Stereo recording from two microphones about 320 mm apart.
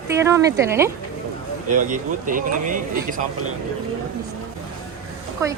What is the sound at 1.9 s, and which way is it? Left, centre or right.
Speech, right.